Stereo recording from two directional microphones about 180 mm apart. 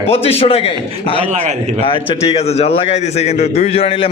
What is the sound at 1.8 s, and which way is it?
A man's voice, 30° left (ahead or behind).